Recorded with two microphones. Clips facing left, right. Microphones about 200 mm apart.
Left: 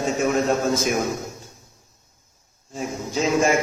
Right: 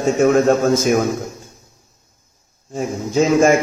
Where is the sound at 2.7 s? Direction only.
50° right (ahead or behind).